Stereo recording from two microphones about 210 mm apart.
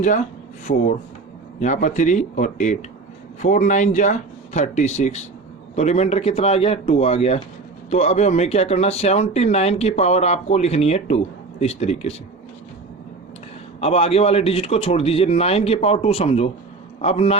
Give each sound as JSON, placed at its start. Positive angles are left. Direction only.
{"t": 0.0, "sound": "a man's voice", "side_deg": 35}
{"t": 13.8, "sound": "a man's voice", "side_deg": 30}